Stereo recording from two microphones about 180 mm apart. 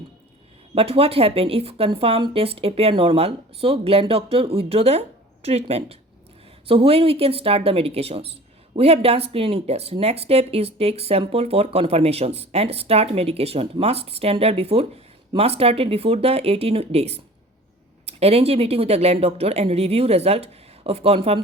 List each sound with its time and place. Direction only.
0.7 s speech: 30° right (ahead or behind)